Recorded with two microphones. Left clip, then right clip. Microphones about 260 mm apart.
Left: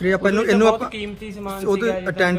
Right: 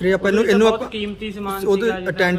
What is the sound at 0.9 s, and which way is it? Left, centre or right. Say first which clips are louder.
Speech: right 4 dB; left.